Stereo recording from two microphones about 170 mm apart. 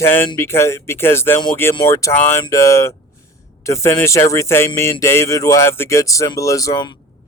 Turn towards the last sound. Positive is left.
turn(degrees=25)  # may be behind; listen again after turning